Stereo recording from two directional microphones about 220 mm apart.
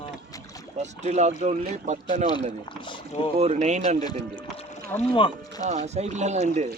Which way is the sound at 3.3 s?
30° right (ahead or behind).